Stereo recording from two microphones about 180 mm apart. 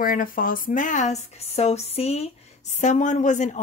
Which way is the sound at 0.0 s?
50° left (ahead or behind).